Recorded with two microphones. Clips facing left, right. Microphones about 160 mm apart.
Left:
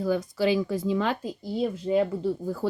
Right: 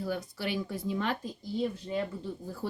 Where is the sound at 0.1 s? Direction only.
90° left.